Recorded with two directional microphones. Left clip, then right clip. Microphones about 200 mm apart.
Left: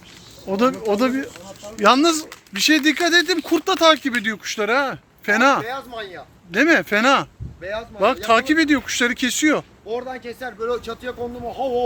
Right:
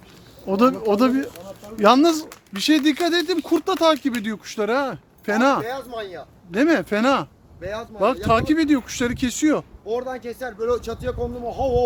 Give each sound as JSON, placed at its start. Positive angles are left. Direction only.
{"t": 0.4, "sound": "speech", "side_deg": -20}
{"t": 5.6, "sound": "speech", "side_deg": -55}
{"t": 6.5, "sound": "speech", "side_deg": -10}
{"t": 7.6, "sound": "speech", "side_deg": -55}
{"t": 7.9, "sound": "speech", "side_deg": -5}
{"t": 9.9, "sound": "speech", "side_deg": -55}